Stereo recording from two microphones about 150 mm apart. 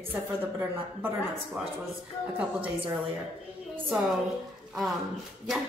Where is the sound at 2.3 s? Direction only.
10° right (ahead or behind).